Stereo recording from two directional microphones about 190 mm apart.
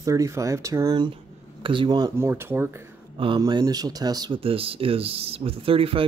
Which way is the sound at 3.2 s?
25° right (ahead or behind).